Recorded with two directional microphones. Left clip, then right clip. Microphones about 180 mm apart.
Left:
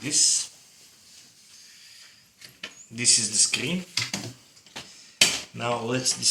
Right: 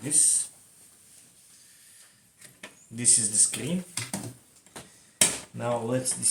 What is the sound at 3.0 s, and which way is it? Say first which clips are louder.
Speech: left 4 dB; 60° right (ahead or behind).